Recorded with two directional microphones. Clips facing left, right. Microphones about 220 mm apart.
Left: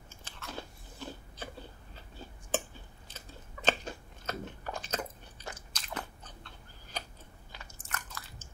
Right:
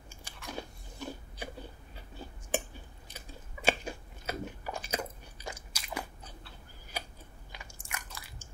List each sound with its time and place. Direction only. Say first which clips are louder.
0.1 s chewing: right 2 dB; 15° right (ahead or behind)
2.5 s chewing: even; 15° right (ahead or behind)
7.5 s biting: left 1 dB; 10° right (ahead or behind)